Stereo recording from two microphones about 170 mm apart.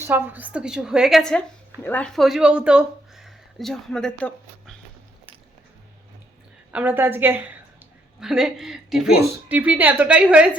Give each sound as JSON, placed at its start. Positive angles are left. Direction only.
{"t": 0.0, "sound": "a woman's voice", "side_deg": -10}
{"t": 6.7, "sound": "a woman's voice", "side_deg": -10}